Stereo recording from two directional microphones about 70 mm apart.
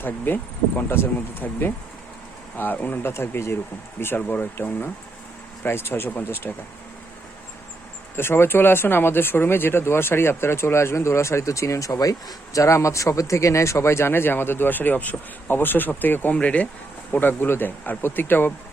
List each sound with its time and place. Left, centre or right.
0.3 s speech: left
3.1 s speech: left
8.1 s speech: left
12.5 s speech: left